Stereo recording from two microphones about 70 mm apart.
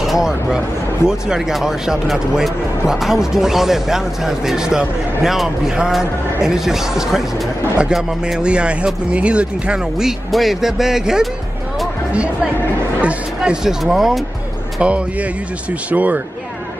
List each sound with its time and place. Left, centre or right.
0.0 s speech: centre
13.0 s speech: centre
14.8 s speech: centre